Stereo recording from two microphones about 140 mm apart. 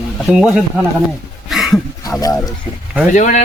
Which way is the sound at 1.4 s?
Centre (ahead or behind).